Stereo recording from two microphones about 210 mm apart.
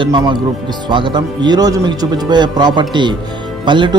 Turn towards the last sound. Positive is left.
turn(degrees=-20)  # may be behind; listen again after turning